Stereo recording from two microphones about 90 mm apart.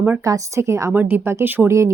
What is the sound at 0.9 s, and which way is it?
Speech, 20° right (ahead or behind).